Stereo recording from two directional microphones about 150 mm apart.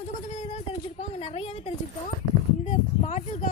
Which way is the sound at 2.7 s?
50° left (ahead or behind).